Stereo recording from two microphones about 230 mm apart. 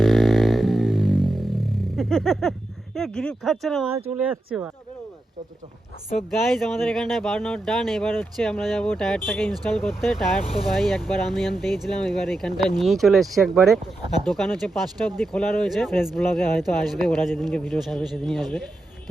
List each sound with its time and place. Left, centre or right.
0.0 s a sound: centre
6.5 s speech: centre
10.4 s speech: left
10.8 s speech: centre